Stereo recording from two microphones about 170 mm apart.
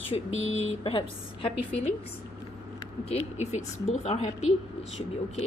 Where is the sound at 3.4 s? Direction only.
40° left (ahead or behind).